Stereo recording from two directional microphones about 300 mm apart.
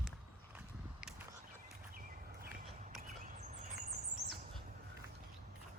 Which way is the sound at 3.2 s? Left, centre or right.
Right.